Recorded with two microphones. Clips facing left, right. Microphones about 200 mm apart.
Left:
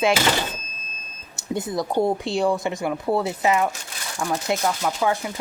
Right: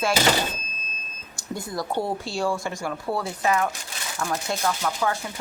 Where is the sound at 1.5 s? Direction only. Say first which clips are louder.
Left 5 dB; 20° left (ahead or behind).